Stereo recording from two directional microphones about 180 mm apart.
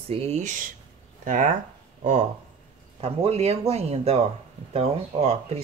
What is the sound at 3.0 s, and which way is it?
Speech, 35° right (ahead or behind).